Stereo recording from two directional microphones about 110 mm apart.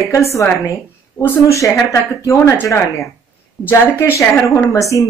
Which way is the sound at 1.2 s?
25° left (ahead or behind).